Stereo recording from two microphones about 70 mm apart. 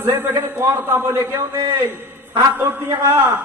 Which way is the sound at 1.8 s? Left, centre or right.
Right.